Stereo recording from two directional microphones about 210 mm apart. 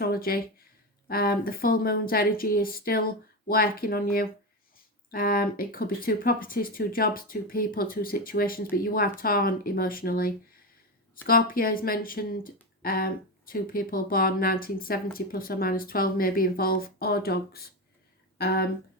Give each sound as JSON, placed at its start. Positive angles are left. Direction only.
{"t": 0.0, "sound": "speech", "side_deg": 45}